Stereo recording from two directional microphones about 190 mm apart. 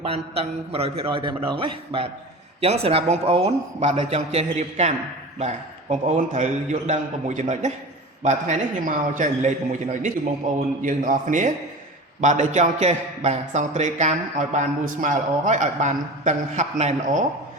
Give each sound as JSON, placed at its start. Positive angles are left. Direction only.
{"t": 0.0, "sound": "a man's voice", "side_deg": -30}